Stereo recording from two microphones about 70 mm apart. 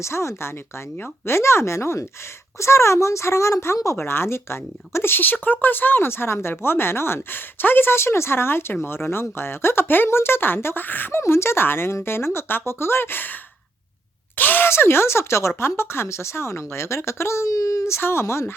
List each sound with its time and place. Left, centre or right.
0.0 s speech: left
11.2 s speech: left
14.3 s speech: left